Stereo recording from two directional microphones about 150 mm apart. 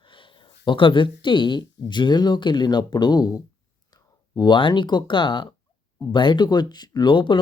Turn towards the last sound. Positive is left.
turn(degrees=35)  # may be behind; listen again after turning